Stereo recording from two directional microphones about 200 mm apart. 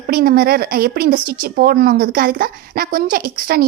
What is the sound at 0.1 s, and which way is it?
Speech, 45° right (ahead or behind).